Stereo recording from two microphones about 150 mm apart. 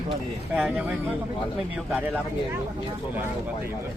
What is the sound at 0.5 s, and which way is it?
Speech, 10° right (ahead or behind).